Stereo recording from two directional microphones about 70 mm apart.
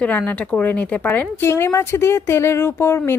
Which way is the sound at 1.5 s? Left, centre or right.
Left.